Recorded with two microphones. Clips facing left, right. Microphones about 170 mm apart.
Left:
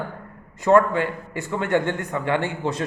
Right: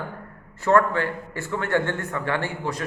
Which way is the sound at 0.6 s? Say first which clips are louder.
Left 3 dB; 15° left (ahead or behind).